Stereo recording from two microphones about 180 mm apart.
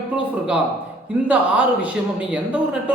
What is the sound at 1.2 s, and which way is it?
Speech, 10° right (ahead or behind).